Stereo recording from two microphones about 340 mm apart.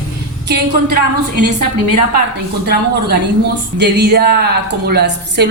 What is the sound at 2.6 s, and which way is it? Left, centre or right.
A woman's voice, right.